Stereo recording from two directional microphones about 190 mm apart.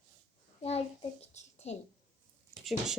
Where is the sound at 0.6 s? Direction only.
35° left (ahead or behind).